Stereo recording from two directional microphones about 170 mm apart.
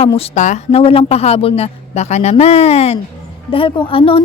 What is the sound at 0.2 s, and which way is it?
A woman's voice, 45° left (ahead or behind).